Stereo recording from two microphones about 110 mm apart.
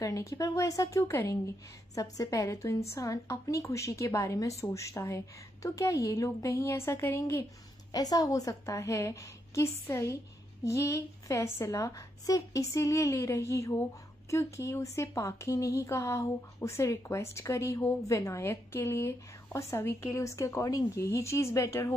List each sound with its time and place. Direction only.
0.0 s a woman's voice: 30° left (ahead or behind)
7.9 s speech: 35° left (ahead or behind)